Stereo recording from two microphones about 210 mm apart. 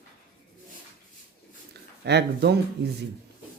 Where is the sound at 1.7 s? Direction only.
50° right (ahead or behind).